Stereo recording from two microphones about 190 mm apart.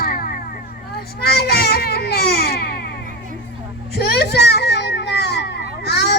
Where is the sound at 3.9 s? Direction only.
55° left (ahead or behind).